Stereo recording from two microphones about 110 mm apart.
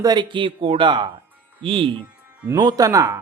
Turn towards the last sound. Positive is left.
turn(degrees=-30)  # may be behind; listen again after turning